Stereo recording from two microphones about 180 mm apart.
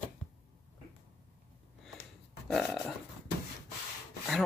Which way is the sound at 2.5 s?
Centre (ahead or behind).